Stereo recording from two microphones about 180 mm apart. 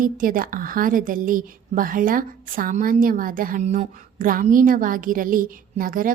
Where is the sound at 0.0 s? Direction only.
50° right (ahead or behind).